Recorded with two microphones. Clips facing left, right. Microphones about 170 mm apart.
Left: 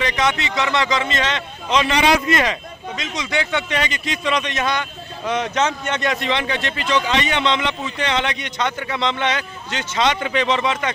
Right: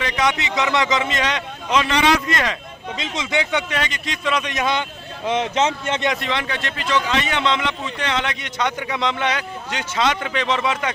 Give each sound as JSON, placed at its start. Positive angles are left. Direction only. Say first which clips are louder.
{"t": 0.0, "sound": "a man's voice", "louder": "left 1 dB", "side_deg": -10}
{"t": 1.8, "sound": "speech", "louder": "left 2 dB", "side_deg": 10}
{"t": 3.0, "sound": "speech", "louder": "right 1 dB", "side_deg": -25}
{"t": 3.4, "sound": "a man's voice", "louder": "even", "side_deg": -10}
{"t": 3.8, "sound": "a man's voice", "louder": "left 2 dB", "side_deg": 0}
{"t": 4.7, "sound": "speech", "louder": "right 1 dB", "side_deg": -25}
{"t": 6.1, "sound": "a man's voice", "louder": "left 3 dB", "side_deg": 0}